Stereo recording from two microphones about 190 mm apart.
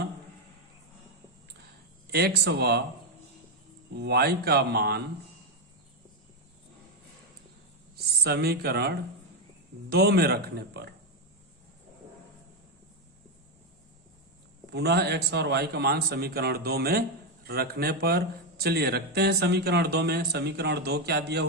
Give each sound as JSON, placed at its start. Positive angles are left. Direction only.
{"t": 2.0, "sound": "a man's voice", "side_deg": -55}
{"t": 3.9, "sound": "a man's voice", "side_deg": -60}
{"t": 7.9, "sound": "a man's voice", "side_deg": -55}
{"t": 14.7, "sound": "a man's voice", "side_deg": -60}